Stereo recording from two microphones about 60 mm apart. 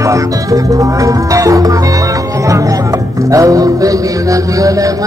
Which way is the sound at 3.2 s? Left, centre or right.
Right.